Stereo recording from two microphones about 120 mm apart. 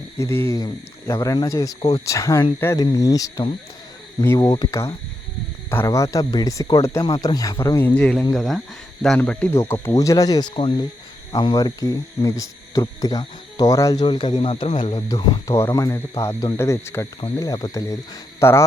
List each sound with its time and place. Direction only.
0.2 s speech: 20° left (ahead or behind)
4.6 s speech: 30° left (ahead or behind)
7.8 s speech: 15° left (ahead or behind)
9.5 s speech: 20° left (ahead or behind)
10.5 s speech: 45° left (ahead or behind)
11.3 s speech: 35° left (ahead or behind)
14.0 s speech: 40° left (ahead or behind)
15.1 s speech: 25° left (ahead or behind)